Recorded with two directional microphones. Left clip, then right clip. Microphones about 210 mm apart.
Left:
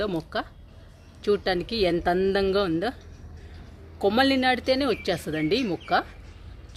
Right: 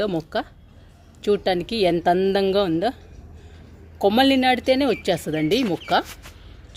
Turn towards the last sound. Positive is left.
turn(degrees=-30)  # may be behind; listen again after turning